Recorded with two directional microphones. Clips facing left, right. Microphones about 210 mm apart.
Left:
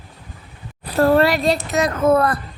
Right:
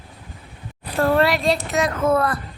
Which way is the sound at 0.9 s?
40° left (ahead or behind).